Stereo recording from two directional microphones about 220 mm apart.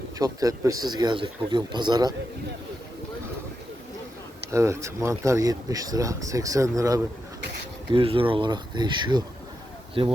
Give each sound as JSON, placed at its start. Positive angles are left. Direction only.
{"t": 0.2, "sound": "speech", "side_deg": -15}
{"t": 4.5, "sound": "speech", "side_deg": -15}